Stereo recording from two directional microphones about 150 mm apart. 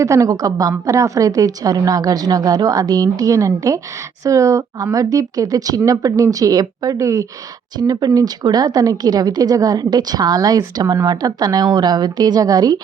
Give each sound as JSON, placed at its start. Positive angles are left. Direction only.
{"t": 0.0, "sound": "speech", "side_deg": -20}